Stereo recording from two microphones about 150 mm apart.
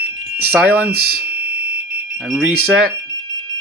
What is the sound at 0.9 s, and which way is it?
Speech, 90° right.